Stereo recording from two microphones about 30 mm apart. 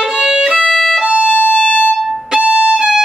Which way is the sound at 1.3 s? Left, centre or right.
Left.